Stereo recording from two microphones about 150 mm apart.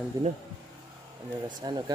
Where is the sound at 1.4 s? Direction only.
30° right (ahead or behind).